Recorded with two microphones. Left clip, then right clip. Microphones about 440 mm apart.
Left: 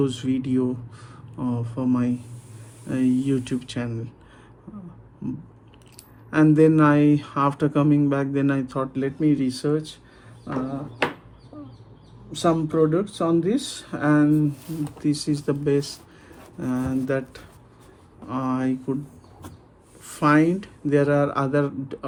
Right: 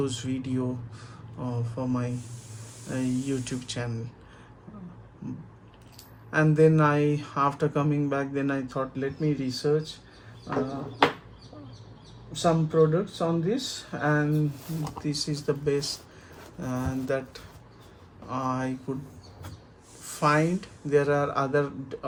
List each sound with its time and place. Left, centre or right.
0.0 s speech: centre
5.2 s a sound: centre
6.3 s speech: centre
12.3 s speech: centre
20.1 s speech: centre